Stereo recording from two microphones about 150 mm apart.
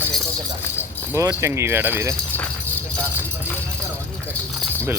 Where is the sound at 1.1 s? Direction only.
20° right (ahead or behind).